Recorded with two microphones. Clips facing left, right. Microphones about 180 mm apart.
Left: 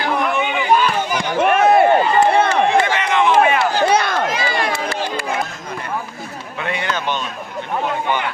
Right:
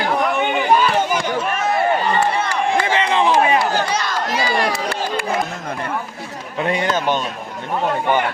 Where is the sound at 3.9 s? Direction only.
60° left (ahead or behind).